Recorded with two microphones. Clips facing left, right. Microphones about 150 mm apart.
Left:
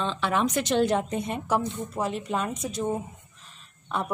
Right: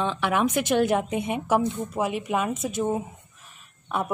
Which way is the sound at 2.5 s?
50° right (ahead or behind).